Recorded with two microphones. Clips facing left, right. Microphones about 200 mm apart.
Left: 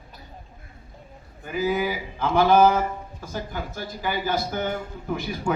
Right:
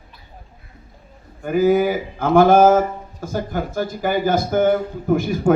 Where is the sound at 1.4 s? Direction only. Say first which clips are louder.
Right 9 dB; 50° right (ahead or behind).